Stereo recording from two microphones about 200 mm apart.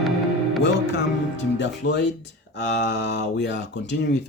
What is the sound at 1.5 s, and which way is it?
Speech, 60° left (ahead or behind).